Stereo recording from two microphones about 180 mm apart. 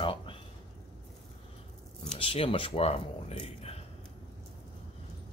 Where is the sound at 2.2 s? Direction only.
30° left (ahead or behind).